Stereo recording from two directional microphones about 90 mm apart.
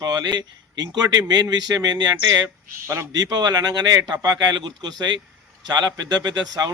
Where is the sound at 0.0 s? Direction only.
50° right (ahead or behind).